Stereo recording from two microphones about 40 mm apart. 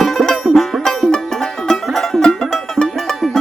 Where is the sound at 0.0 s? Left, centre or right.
Centre.